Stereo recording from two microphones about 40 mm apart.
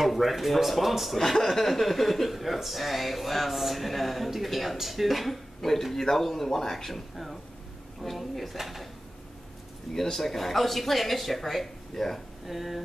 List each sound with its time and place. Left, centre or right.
0.0 s a man's voice: centre
10.1 s a man's voice: centre
12.4 s a man's voice: centre